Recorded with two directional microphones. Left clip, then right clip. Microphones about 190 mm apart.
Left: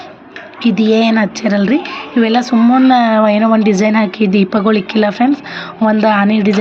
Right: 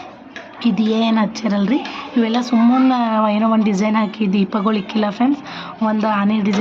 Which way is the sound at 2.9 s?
20° left (ahead or behind).